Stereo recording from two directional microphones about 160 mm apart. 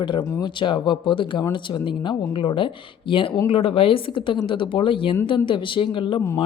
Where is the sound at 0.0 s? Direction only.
30° left (ahead or behind).